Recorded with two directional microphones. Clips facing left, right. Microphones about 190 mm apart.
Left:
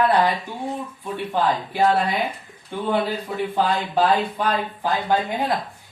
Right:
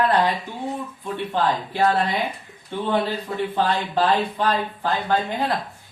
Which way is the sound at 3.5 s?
10° left (ahead or behind).